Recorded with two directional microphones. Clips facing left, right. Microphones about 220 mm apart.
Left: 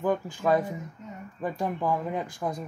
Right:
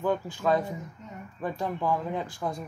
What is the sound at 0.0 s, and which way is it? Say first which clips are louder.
Speech: left 1 dB; 10° left (ahead or behind).